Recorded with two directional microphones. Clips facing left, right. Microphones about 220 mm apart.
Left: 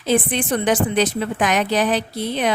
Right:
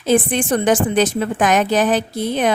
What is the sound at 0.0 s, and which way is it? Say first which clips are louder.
A woman's voice: right 3 dB; 50° right (ahead or behind).